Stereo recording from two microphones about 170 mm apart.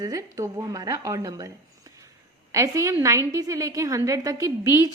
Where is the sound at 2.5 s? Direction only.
20° right (ahead or behind).